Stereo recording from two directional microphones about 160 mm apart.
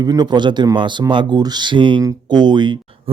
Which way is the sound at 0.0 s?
25° right (ahead or behind).